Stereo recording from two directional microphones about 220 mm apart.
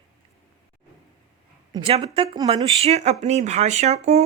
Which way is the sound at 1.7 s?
25° right (ahead or behind).